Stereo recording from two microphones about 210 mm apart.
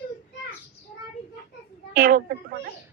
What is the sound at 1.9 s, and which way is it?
Speech, 45° right (ahead or behind).